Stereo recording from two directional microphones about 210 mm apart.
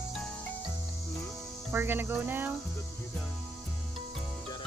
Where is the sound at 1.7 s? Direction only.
10° right (ahead or behind).